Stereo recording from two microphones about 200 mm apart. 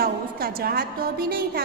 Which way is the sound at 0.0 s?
50° right (ahead or behind).